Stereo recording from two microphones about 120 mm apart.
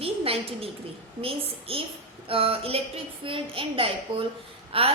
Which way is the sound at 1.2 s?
50° right (ahead or behind).